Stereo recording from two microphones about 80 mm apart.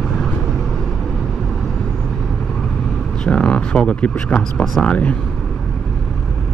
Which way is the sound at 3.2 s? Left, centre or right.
Centre.